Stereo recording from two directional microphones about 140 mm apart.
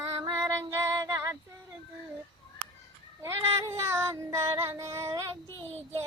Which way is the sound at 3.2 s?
20° right (ahead or behind).